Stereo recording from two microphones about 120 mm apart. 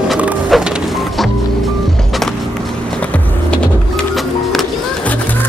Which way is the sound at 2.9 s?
10° left (ahead or behind).